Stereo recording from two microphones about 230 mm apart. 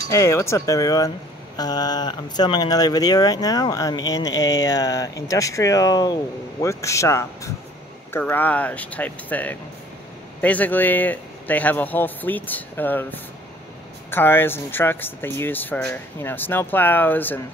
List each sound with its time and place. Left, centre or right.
0.1 s speech: centre